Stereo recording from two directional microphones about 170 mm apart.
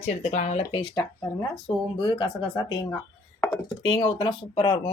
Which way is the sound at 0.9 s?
25° left (ahead or behind).